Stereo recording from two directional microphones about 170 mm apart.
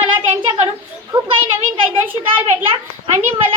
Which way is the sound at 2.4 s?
35° right (ahead or behind).